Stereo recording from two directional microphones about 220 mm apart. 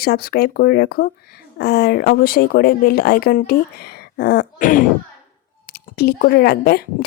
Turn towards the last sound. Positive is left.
turn(degrees=45)  # may be behind; listen again after turning